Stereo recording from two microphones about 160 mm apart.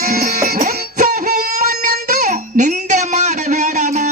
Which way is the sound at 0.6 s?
50° right (ahead or behind).